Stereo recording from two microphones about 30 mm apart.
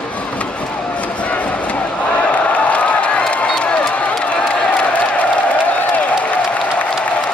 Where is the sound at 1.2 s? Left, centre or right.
Left.